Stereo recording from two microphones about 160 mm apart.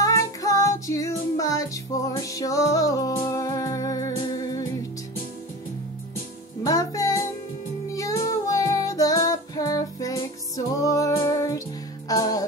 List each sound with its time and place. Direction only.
0.0 s music: 20° left (ahead or behind)
6.6 s music: 20° left (ahead or behind)